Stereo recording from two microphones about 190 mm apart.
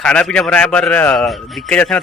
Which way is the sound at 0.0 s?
5° left (ahead or behind).